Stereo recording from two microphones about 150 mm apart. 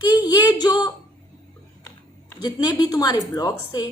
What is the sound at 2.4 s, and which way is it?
A woman's voice, 25° left (ahead or behind).